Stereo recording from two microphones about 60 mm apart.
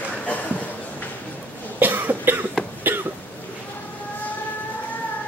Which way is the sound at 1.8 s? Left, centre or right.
Right.